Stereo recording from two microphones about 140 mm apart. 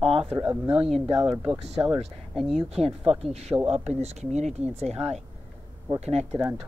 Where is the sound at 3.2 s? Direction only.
50° right (ahead or behind).